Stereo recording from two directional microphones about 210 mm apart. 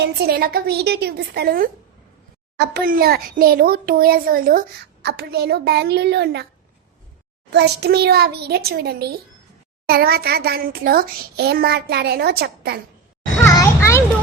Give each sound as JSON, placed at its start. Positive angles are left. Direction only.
{"t": 0.0, "sound": "a child's voice", "side_deg": -50}
{"t": 7.5, "sound": "a child's voice", "side_deg": -50}
{"t": 13.4, "sound": "children playing", "side_deg": 15}